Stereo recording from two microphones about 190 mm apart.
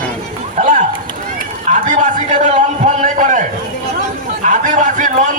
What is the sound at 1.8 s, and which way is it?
A man's voice, 45° right (ahead or behind).